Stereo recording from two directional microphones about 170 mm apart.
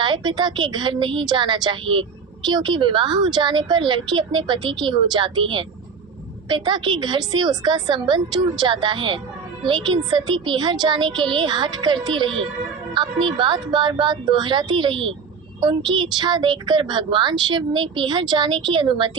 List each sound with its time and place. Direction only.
0.0 s speech: 25° right (ahead or behind)